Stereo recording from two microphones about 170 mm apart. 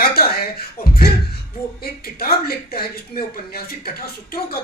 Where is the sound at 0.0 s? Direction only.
65° left (ahead or behind).